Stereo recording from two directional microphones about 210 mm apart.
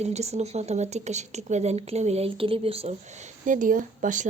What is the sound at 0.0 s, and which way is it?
Speech, 30° right (ahead or behind).